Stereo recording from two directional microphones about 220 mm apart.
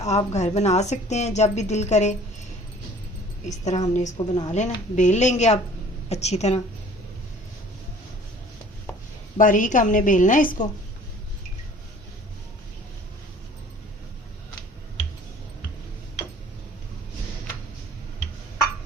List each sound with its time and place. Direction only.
0.0 s a woman's voice: 30° left (ahead or behind)
3.6 s a woman's voice: 30° left (ahead or behind)
4.2 s a woman's voice: 20° left (ahead or behind)
4.5 s a woman's voice: 30° left (ahead or behind)
9.4 s a woman's voice: 35° left (ahead or behind)